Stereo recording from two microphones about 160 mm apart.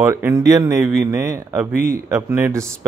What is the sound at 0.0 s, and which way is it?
Speech, 15° right (ahead or behind).